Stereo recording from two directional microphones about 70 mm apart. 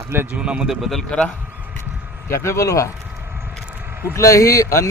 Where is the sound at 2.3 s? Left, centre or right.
Left.